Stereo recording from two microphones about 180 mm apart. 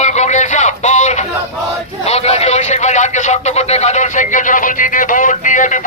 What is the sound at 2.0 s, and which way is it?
A man's voice, 35° left (ahead or behind).